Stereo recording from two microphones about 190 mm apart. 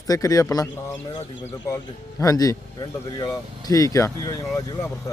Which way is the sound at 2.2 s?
20° left (ahead or behind).